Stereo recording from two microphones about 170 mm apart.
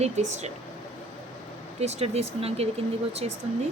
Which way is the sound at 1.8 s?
40° right (ahead or behind).